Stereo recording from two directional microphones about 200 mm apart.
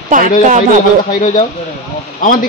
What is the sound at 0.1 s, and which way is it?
Speech, 40° right (ahead or behind).